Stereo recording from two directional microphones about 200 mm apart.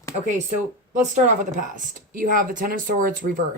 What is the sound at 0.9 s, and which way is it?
Speech, 40° right (ahead or behind).